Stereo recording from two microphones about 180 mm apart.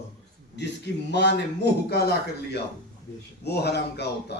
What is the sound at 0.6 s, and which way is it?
A man's voice, 70° left (ahead or behind).